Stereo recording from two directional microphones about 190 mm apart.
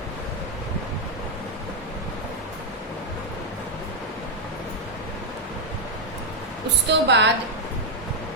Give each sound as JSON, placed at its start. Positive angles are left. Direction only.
{"t": 6.8, "sound": "a woman's voice", "side_deg": -65}